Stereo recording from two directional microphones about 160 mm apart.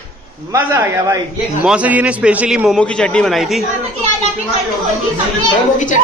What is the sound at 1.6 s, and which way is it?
A man's voice, 5° right (ahead or behind).